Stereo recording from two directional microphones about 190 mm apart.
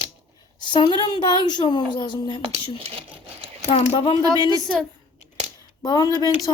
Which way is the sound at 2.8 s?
30° right (ahead or behind).